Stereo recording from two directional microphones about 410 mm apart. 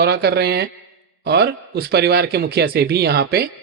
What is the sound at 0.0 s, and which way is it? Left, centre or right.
A man's voice, right.